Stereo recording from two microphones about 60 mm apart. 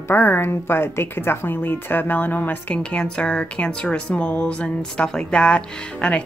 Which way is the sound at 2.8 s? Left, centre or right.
Centre.